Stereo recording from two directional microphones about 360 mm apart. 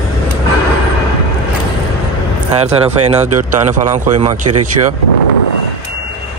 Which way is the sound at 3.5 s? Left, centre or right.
Right.